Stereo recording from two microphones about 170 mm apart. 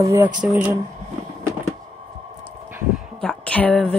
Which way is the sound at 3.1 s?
5° left (ahead or behind).